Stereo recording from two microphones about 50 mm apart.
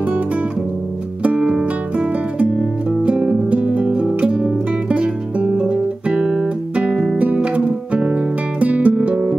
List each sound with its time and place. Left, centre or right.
1.2 s music: right
2.3 s music: right